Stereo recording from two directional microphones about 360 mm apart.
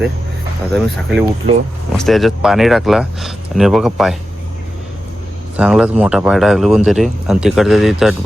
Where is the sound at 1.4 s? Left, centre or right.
Right.